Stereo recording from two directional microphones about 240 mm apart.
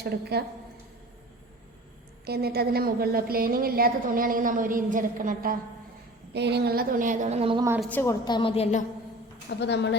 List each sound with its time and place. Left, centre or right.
0.0 s a woman's voice: right
2.2 s a woman's voice: right; by 7.8 s centre
7.8 s a woman's voice: centre; by 8.8 s left
9.5 s a woman's voice: left